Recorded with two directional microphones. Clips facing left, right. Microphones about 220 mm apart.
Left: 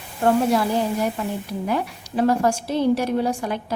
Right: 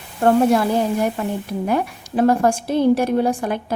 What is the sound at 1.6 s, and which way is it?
A woman's voice, 50° right (ahead or behind).